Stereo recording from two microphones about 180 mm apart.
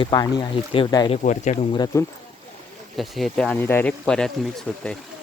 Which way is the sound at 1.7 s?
20° left (ahead or behind).